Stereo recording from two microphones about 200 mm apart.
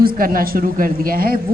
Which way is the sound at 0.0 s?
45° right (ahead or behind).